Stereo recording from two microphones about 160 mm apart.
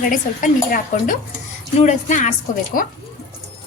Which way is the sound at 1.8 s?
50° left (ahead or behind).